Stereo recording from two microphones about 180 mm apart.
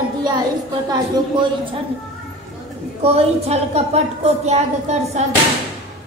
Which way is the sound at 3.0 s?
35° right (ahead or behind).